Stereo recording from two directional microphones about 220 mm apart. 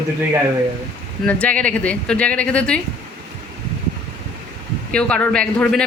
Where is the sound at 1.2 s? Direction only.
5° left (ahead or behind).